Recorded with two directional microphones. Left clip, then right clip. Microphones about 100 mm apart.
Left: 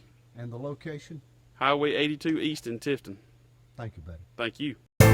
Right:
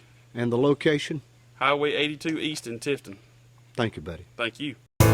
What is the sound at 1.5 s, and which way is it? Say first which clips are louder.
Speech: right 2 dB; 25° right (ahead or behind).